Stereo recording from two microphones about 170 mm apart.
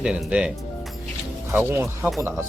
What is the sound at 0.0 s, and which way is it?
Speech, 5° right (ahead or behind).